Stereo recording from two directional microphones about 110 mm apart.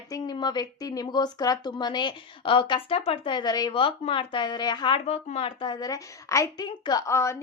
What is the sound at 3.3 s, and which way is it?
Speech, 35° left (ahead or behind).